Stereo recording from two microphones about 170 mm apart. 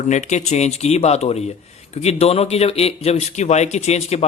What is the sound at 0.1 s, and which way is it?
Speech, 45° left (ahead or behind).